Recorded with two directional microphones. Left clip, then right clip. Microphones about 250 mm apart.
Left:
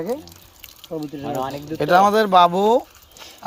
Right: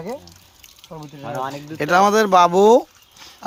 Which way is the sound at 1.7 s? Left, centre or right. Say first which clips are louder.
Even; centre.